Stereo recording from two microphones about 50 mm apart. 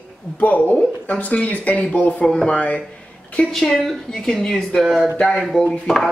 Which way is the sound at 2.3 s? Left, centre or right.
Centre.